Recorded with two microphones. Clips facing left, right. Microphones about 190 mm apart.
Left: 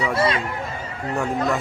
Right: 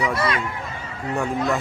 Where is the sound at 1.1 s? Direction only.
5° right (ahead or behind).